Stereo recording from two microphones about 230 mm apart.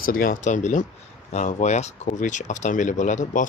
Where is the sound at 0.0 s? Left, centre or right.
Left.